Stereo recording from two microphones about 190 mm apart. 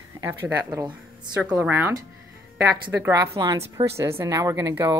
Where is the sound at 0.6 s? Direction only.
25° right (ahead or behind).